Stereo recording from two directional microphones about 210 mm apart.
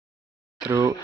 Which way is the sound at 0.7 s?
15° right (ahead or behind).